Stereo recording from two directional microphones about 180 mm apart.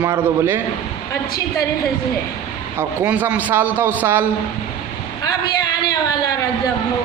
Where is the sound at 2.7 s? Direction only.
10° right (ahead or behind).